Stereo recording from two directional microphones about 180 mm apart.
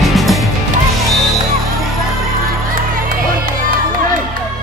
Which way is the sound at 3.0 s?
50° right (ahead or behind).